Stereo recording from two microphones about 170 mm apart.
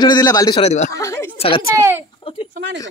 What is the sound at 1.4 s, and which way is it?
Speech, 30° left (ahead or behind).